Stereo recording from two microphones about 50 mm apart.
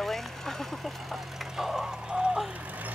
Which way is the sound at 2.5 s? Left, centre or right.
Right.